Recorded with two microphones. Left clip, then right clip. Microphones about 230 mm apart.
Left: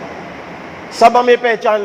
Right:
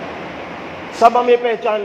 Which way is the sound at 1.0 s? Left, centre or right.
Left.